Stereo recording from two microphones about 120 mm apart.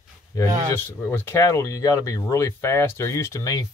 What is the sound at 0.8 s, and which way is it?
Speech, 15° left (ahead or behind).